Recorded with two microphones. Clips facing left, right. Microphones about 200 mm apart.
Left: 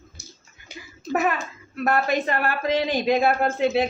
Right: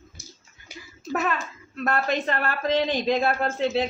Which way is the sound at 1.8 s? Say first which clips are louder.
Left 3 dB; 10° left (ahead or behind).